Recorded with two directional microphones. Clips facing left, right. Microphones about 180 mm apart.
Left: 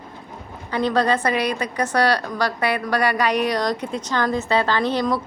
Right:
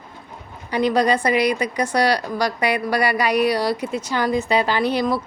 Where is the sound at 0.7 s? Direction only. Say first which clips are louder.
Right 2 dB; 15° right (ahead or behind).